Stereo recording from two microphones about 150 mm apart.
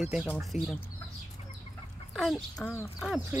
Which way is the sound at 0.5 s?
50° left (ahead or behind).